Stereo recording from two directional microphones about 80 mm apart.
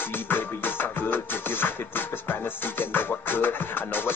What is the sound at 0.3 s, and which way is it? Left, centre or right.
Music, left.